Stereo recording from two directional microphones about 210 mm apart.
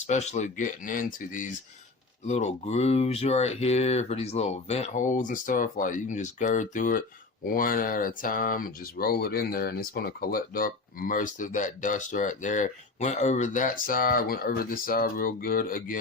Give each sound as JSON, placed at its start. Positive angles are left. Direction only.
{"t": 0.1, "sound": "speech", "side_deg": 35}